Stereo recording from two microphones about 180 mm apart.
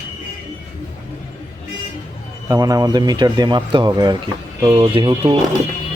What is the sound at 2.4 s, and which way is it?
Speech, 20° right (ahead or behind).